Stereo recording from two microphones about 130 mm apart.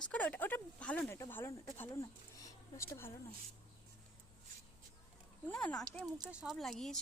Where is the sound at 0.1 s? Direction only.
10° left (ahead or behind).